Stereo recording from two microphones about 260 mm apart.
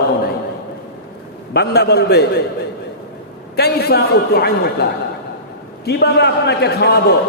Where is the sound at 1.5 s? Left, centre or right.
Left.